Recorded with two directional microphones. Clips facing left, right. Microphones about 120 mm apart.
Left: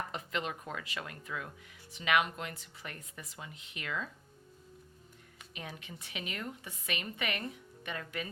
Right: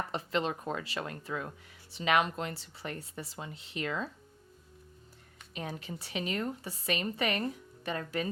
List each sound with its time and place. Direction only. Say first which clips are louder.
0.1 s speech: right 5 dB; 30° right (ahead or behind)
5.5 s speech: right 6 dB; 35° right (ahead or behind)